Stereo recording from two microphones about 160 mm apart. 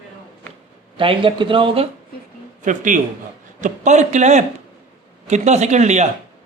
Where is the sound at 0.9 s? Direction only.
35° right (ahead or behind).